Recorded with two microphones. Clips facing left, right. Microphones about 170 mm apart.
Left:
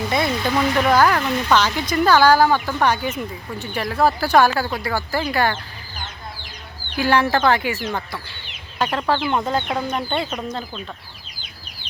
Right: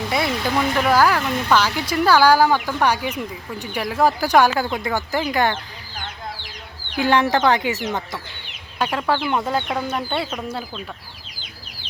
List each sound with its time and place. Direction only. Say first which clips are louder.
0.1 s speech: even; 5° right (ahead or behind)
6.9 s speech: even; 20° right (ahead or behind)